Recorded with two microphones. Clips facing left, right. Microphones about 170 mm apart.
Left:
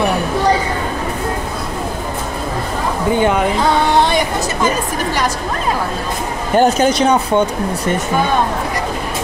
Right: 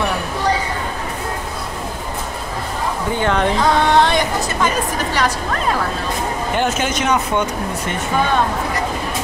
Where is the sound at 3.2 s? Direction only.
10° left (ahead or behind).